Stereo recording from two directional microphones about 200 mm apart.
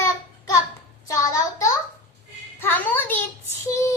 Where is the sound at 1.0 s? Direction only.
15° left (ahead or behind).